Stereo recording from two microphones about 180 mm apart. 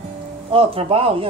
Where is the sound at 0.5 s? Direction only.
35° right (ahead or behind).